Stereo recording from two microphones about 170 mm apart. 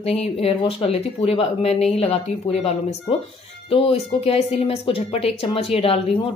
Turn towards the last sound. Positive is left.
turn(degrees=35)  # may be behind; listen again after turning